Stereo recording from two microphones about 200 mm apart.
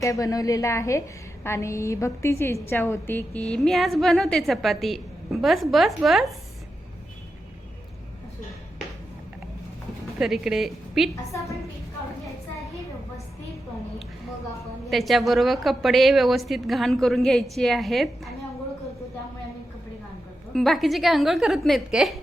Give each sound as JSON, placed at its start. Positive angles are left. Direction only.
{"t": 0.0, "sound": "a woman's voice", "side_deg": 15}
{"t": 10.2, "sound": "a woman's voice", "side_deg": 0}
{"t": 11.1, "sound": "a woman's voice", "side_deg": 15}
{"t": 14.8, "sound": "a woman's voice", "side_deg": 0}
{"t": 20.5, "sound": "a woman's voice", "side_deg": 0}